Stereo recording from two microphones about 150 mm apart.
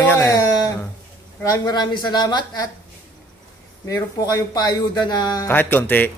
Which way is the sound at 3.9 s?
20° left (ahead or behind).